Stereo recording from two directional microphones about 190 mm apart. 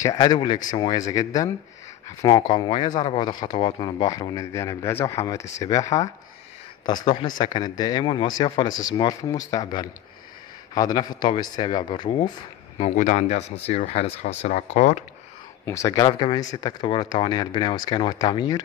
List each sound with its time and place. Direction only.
0.0 s a man's voice: 20° left (ahead or behind); by 15.0 s 40° left (ahead or behind)
15.6 s a man's voice: 15° left (ahead or behind)